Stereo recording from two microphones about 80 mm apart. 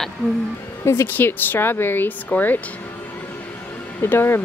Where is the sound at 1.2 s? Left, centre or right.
Left.